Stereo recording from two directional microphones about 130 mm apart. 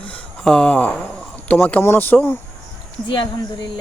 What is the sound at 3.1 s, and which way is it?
Speech, 40° left (ahead or behind).